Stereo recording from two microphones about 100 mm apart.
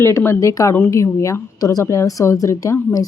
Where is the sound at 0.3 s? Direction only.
35° left (ahead or behind).